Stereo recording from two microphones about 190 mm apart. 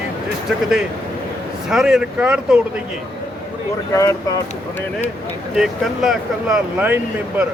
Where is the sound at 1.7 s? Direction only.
5° right (ahead or behind).